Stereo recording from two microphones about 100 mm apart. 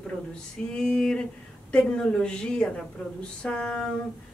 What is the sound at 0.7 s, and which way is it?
A woman's voice, 10° left (ahead or behind).